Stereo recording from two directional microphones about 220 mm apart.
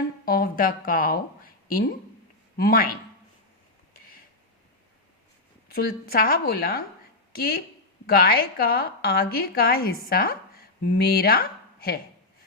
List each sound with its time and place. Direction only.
0.3 s speech: 40° left (ahead or behind)
2.6 s speech: 40° left (ahead or behind)
5.7 s a woman's voice: 45° left (ahead or behind)